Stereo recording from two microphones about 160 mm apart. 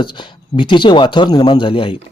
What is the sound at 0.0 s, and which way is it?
Speech, 30° left (ahead or behind).